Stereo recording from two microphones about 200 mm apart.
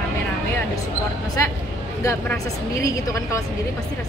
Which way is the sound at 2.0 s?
15° left (ahead or behind).